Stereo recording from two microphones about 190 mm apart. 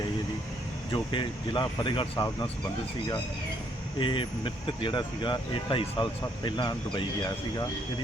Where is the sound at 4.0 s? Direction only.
25° left (ahead or behind).